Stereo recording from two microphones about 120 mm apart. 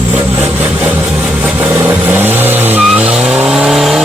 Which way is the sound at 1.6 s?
20° right (ahead or behind).